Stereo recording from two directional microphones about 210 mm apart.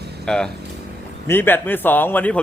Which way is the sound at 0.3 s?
5° left (ahead or behind).